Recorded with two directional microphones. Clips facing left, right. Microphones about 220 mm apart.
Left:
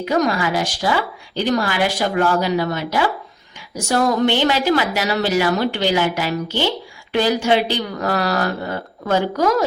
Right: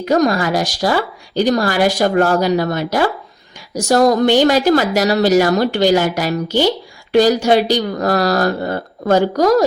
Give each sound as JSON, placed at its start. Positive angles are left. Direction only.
{"t": 0.0, "sound": "speech", "side_deg": -40}